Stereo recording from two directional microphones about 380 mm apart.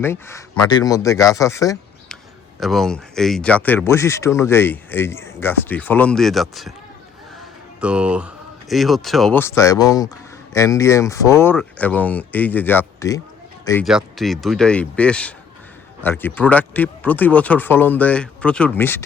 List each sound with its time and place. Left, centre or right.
0.0 s speech: centre
7.3 s a sound: centre
8.7 s speech: centre